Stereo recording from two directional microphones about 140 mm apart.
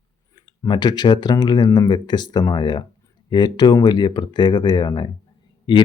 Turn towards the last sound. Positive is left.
turn(degrees=35)  # may be behind; listen again after turning